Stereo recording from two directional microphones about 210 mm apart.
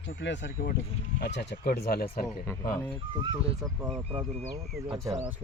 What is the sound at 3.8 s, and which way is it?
Speech, 25° right (ahead or behind).